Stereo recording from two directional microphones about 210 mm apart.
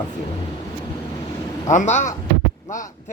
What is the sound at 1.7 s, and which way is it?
Speech, 35° left (ahead or behind).